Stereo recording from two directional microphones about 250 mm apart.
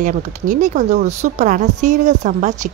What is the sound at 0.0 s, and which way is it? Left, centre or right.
Speech, right.